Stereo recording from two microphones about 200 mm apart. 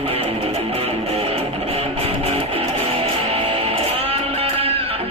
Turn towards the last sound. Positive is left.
turn(degrees=-30)  # may be behind; listen again after turning